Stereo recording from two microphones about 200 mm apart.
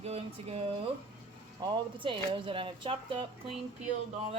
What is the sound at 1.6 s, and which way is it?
Speech, 25° right (ahead or behind).